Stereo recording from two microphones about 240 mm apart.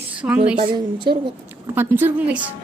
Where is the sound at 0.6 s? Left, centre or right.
Centre.